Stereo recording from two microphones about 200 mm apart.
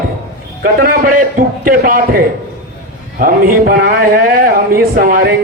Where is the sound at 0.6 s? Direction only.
45° right (ahead or behind).